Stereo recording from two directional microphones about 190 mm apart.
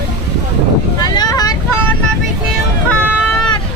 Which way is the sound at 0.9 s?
20° left (ahead or behind).